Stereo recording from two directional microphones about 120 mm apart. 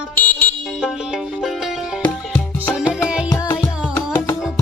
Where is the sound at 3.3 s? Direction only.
25° left (ahead or behind).